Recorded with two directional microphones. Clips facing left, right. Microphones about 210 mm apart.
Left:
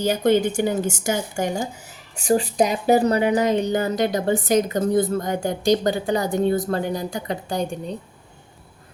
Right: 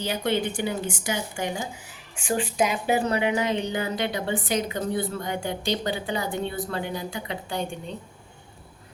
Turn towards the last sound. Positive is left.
turn(degrees=40)  # may be behind; listen again after turning